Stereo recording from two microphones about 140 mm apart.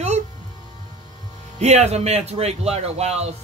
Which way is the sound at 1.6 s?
50° right (ahead or behind).